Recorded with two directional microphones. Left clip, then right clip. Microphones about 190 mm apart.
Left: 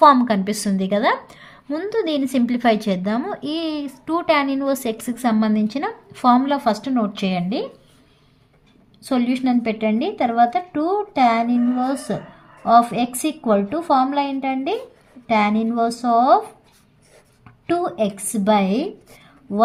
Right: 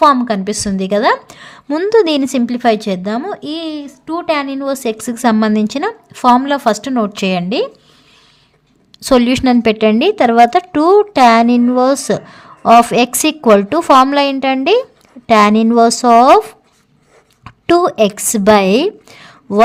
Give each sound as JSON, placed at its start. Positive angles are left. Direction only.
{"t": 0.0, "sound": "a woman's voice", "side_deg": -15}
{"t": 9.0, "sound": "a woman's voice", "side_deg": -50}
{"t": 17.4, "sound": "speech", "side_deg": -55}